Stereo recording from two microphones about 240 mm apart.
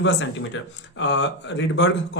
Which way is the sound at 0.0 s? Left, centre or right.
Left.